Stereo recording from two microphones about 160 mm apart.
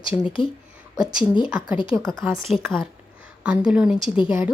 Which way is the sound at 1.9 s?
15° right (ahead or behind).